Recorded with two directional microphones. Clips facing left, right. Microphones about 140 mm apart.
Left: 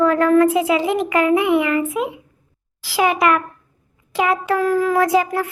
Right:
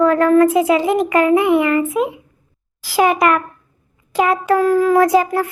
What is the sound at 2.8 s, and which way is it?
A child's voice, 45° right (ahead or behind).